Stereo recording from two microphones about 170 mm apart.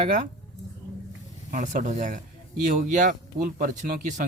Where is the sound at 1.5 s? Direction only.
50° right (ahead or behind).